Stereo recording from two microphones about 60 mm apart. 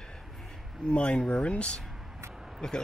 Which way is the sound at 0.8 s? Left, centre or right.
Centre.